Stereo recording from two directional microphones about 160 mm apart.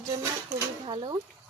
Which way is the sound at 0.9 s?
30° right (ahead or behind).